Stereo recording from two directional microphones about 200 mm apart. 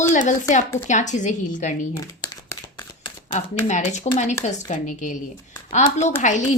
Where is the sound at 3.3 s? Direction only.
35° left (ahead or behind).